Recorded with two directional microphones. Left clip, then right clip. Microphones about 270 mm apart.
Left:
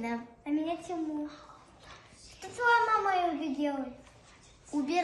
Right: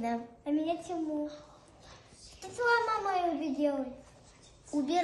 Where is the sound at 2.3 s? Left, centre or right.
Centre.